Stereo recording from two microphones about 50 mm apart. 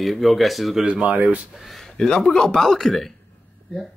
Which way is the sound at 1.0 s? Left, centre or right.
Right.